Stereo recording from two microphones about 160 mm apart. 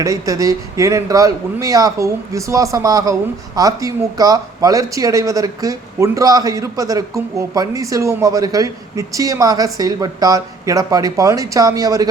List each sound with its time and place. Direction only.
0.0 s speech: 20° right (ahead or behind)